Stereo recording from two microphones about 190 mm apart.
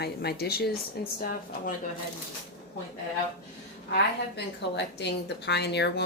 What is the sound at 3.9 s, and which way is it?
Speech, 65° left (ahead or behind).